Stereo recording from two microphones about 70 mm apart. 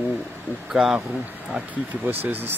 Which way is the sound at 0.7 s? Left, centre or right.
Centre.